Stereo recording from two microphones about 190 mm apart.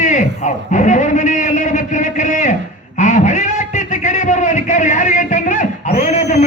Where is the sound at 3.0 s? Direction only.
40° left (ahead or behind).